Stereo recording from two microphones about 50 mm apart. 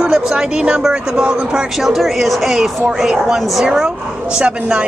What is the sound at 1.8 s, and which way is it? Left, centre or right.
Speech, centre.